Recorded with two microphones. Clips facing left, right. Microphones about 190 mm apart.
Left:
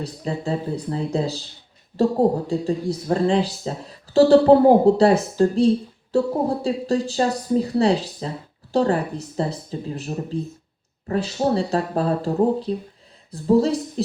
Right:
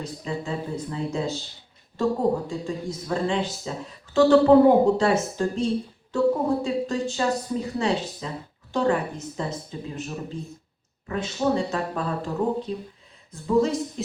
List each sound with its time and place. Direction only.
0.0 s speech: 35° left (ahead or behind)